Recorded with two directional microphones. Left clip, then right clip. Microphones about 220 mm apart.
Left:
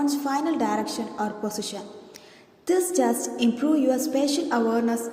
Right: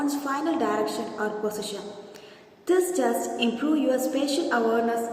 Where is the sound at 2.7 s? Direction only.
35° left (ahead or behind).